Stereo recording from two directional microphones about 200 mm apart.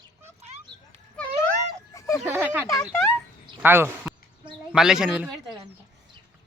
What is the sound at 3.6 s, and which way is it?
A man's voice, 10° right (ahead or behind).